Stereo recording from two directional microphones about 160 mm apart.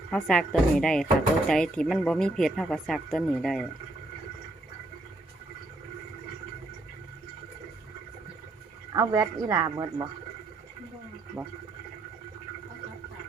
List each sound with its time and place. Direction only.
0.1 s speech: 5° left (ahead or behind)
8.9 s speech: 20° right (ahead or behind)